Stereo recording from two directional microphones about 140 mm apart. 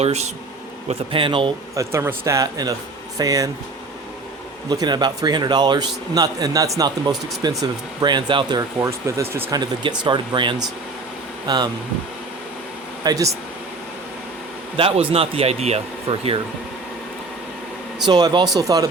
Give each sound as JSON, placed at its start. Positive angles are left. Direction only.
{"t": 0.0, "sound": "speech", "side_deg": -50}
{"t": 0.9, "sound": "speech", "side_deg": -40}
{"t": 1.7, "sound": "speech", "side_deg": -20}
{"t": 4.7, "sound": "speech", "side_deg": -30}
{"t": 13.1, "sound": "speech", "side_deg": -25}
{"t": 14.8, "sound": "speech", "side_deg": -40}
{"t": 18.0, "sound": "speech", "side_deg": -30}